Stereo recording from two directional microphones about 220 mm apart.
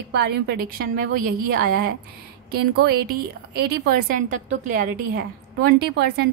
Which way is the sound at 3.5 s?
45° right (ahead or behind).